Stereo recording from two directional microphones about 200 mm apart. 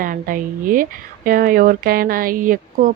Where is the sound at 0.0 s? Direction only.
45° right (ahead or behind).